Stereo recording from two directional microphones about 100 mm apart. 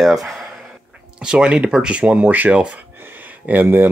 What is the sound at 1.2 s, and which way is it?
Speech, 10° right (ahead or behind).